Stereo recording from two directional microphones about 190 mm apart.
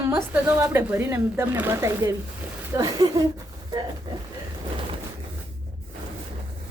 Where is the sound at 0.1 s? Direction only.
10° right (ahead or behind).